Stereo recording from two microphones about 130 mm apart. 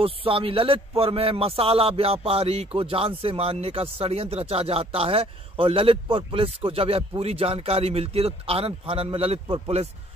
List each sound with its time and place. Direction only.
0.0 s speech: 45° right (ahead or behind)